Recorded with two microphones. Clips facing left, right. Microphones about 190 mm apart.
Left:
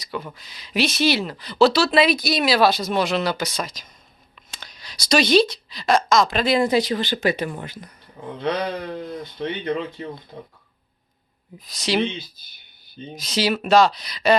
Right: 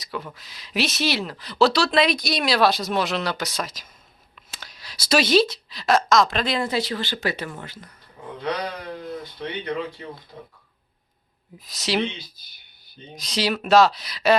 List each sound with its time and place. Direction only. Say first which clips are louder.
0.0 s speech: left 2 dB; centre (ahead or behind); by 7.9 s 15° left (ahead or behind)
9.0 s speech: left 3 dB; 25° left (ahead or behind)
11.6 s speech: left 2 dB; centre (ahead or behind)
13.1 s speech: left 2 dB; centre (ahead or behind)